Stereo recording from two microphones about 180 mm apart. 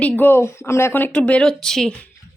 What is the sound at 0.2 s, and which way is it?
Speech, 10° left (ahead or behind).